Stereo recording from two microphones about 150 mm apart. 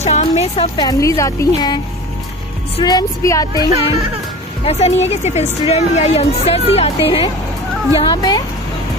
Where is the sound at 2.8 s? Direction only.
25° left (ahead or behind).